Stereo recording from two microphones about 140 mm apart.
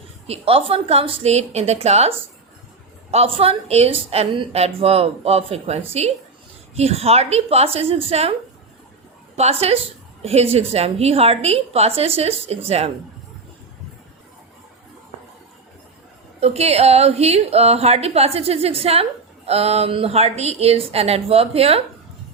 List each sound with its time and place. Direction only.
0.3 s a woman's voice: 45° right (ahead or behind)
9.3 s a woman's voice: 50° right (ahead or behind)
16.4 s a woman's voice: 50° right (ahead or behind)